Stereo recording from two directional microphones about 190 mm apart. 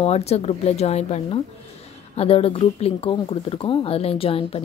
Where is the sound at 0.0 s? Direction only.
35° left (ahead or behind).